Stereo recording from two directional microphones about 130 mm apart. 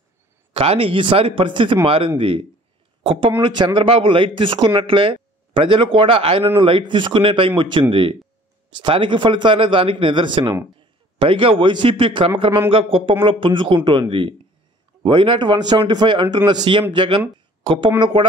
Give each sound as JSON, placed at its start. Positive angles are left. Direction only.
{"t": 0.5, "sound": "speech", "side_deg": -50}
{"t": 3.0, "sound": "a sound", "side_deg": -40}
{"t": 3.4, "sound": "a man's voice", "side_deg": -35}